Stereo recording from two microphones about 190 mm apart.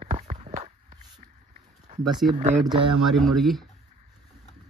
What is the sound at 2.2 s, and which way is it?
Speech, centre (ahead or behind).